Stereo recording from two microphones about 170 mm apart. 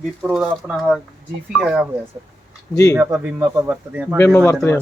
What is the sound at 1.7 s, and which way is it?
Speech, 15° right (ahead or behind).